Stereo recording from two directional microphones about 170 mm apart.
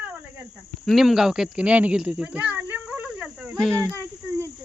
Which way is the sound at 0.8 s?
Centre (ahead or behind).